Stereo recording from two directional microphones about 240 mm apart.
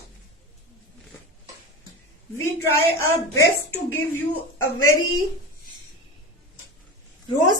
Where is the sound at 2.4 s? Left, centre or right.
Centre.